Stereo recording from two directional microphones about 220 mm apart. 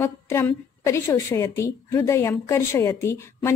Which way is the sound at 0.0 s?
10° left (ahead or behind).